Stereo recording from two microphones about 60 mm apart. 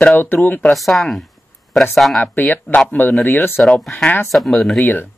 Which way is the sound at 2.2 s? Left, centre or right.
Left.